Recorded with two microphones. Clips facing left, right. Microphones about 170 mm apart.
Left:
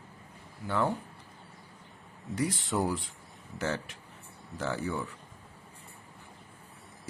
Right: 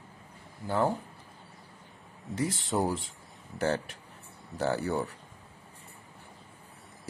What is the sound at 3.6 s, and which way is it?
A man's voice, 35° right (ahead or behind).